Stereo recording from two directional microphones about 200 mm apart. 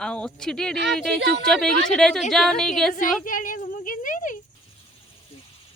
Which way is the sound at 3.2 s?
40° left (ahead or behind).